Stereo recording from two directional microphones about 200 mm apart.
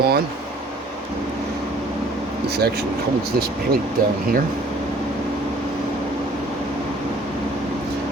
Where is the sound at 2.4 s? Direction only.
55° right (ahead or behind).